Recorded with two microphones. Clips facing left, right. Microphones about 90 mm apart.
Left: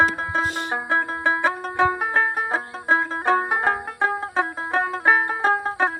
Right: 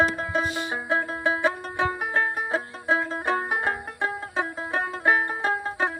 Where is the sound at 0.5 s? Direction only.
55° left (ahead or behind).